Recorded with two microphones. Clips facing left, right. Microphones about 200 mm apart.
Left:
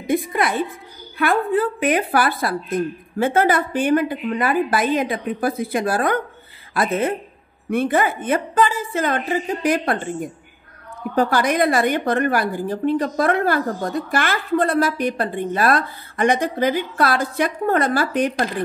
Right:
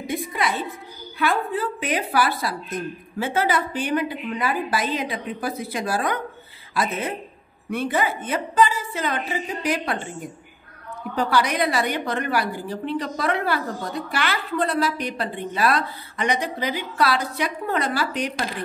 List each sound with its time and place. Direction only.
0.0 s a woman's voice: 55° left (ahead or behind)
11.1 s a woman's voice: 50° left (ahead or behind)